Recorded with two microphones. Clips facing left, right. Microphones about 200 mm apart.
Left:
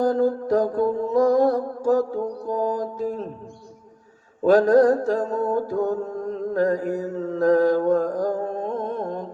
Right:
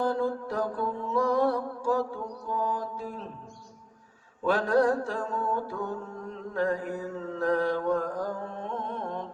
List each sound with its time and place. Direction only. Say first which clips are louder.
0.0 s music: left 7 dB; 40° left (ahead or behind)
4.4 s mantra: left 9 dB; 40° left (ahead or behind)